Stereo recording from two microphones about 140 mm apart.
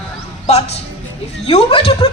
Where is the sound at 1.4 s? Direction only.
45° left (ahead or behind).